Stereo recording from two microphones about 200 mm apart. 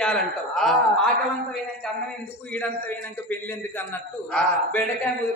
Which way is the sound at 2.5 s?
10° left (ahead or behind).